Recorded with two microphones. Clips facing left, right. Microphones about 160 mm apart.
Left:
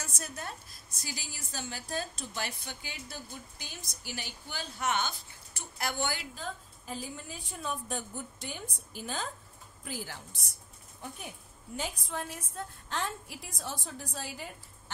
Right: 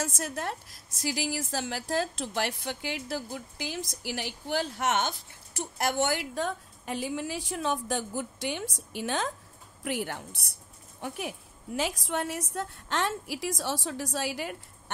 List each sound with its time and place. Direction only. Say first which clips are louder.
0.0 s a woman's voice: right 9 dB; 90° right
9.8 s a woman's voice: right 8 dB; 65° right (ahead or behind)
11.0 s a woman's voice: right 8 dB; 75° right (ahead or behind)